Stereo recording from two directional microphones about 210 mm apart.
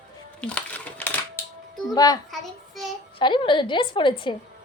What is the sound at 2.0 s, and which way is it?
A woman's voice, 20° left (ahead or behind).